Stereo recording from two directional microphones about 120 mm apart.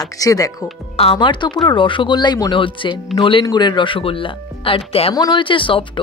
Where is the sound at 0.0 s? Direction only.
30° left (ahead or behind).